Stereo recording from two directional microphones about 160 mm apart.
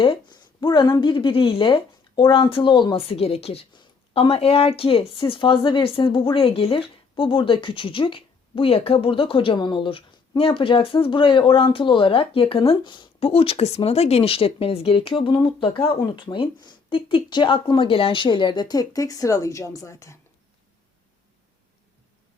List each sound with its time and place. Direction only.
0.0 s speech: 30° left (ahead or behind)